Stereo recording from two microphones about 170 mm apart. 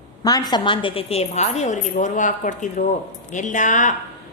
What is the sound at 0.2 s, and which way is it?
A woman's voice, 20° left (ahead or behind).